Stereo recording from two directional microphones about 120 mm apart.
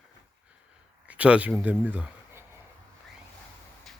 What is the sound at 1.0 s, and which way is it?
Speech, 10° right (ahead or behind).